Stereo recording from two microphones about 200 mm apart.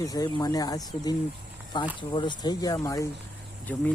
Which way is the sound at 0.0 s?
20° left (ahead or behind).